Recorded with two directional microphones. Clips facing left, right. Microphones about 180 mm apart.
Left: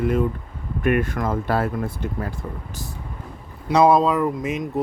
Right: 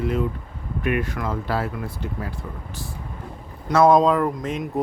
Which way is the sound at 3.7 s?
15° left (ahead or behind).